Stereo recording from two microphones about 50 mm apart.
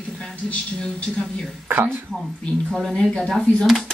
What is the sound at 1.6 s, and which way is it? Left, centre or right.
Speech, right.